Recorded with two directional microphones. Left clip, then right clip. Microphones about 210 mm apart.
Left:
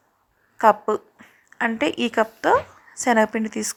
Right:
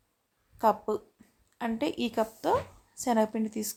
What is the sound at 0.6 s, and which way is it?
Speech, 15° left (ahead or behind).